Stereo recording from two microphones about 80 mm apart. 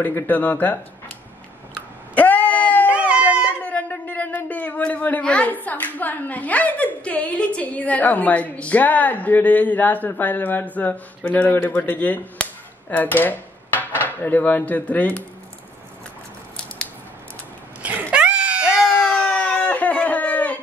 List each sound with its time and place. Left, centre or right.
0.0 s speech: left
2.1 s a sound: centre
2.9 s dog: centre
3.6 s a man's voice: centre
12.9 s dishes: left
18.1 s screaming: centre
18.9 s a sound: centre